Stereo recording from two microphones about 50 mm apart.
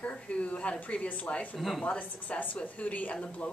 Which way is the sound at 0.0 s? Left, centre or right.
Left.